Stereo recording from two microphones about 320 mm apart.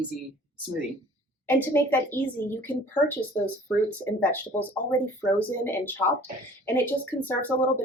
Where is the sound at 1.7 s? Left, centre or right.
Centre.